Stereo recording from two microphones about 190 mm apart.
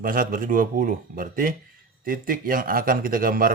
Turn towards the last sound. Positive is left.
turn(degrees=-50)  # may be behind; listen again after turning